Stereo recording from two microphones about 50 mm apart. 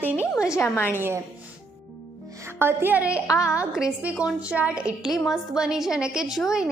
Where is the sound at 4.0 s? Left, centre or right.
Right.